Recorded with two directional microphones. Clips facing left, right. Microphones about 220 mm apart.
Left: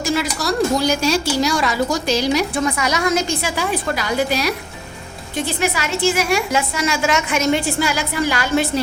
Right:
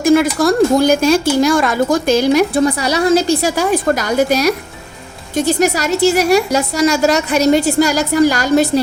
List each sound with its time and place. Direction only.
0.0 s a woman's voice: 50° right (ahead or behind)
2.6 s a woman's voice: 35° right (ahead or behind)